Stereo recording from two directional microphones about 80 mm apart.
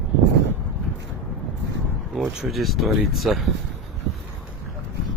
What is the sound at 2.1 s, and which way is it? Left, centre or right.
Speech, centre.